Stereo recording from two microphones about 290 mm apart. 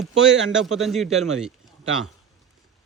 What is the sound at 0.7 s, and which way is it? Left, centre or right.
Speech, centre.